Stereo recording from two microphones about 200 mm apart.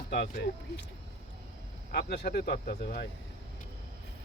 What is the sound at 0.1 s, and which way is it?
Speech, 55° left (ahead or behind).